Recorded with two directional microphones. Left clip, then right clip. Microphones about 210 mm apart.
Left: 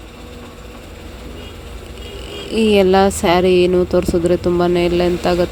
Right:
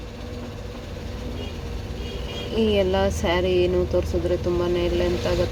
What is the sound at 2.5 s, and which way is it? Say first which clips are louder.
Speech: left 9 dB; 50° left (ahead or behind).